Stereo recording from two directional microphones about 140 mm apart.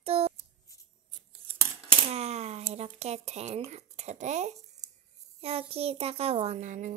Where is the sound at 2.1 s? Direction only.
50° right (ahead or behind).